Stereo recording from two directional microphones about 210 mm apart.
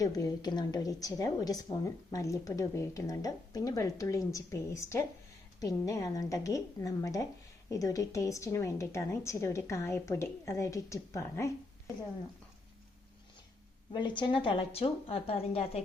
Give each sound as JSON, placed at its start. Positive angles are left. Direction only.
{"t": 0.0, "sound": "a woman's voice", "side_deg": 15}
{"t": 13.9, "sound": "a woman's voice", "side_deg": 20}